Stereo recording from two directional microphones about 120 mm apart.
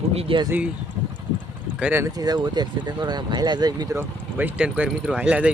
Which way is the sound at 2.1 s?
35° right (ahead or behind).